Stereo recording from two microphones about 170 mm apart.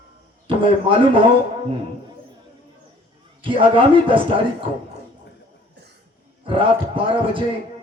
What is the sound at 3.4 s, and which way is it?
Speech, 30° right (ahead or behind).